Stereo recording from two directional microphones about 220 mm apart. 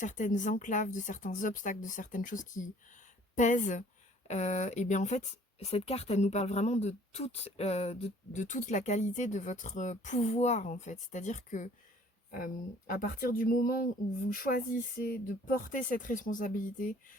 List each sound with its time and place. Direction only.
0.0 s speech: 35° left (ahead or behind)
12.9 s speech: 40° left (ahead or behind)